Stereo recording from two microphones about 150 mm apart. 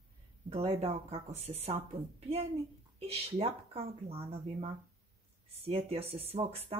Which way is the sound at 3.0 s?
40° right (ahead or behind).